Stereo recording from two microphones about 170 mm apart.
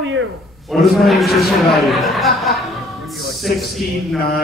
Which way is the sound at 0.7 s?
Centre (ahead or behind).